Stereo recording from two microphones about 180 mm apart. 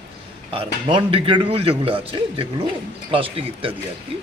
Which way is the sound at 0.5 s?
30° right (ahead or behind).